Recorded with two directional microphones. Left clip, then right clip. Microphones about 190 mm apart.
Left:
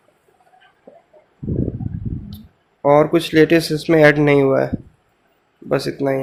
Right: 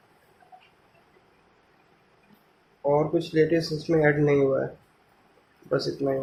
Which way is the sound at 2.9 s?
50° left (ahead or behind).